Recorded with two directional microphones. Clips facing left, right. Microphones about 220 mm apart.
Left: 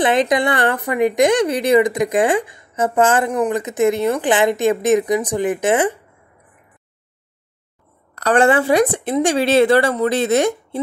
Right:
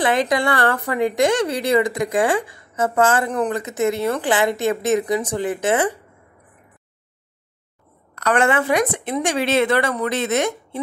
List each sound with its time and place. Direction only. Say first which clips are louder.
0.0 s a woman's voice: left 3 dB; 20° left (ahead or behind)
8.1 s speech: left 4 dB; 35° left (ahead or behind)